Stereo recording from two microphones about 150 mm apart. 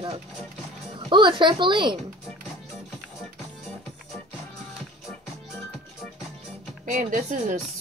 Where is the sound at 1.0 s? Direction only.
30° right (ahead or behind).